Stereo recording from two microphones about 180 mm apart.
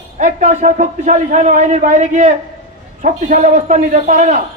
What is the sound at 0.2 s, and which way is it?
A man's voice, 40° right (ahead or behind).